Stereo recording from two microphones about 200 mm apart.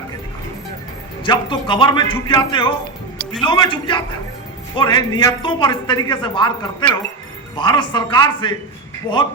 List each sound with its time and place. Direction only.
1.2 s speech: 25° left (ahead or behind)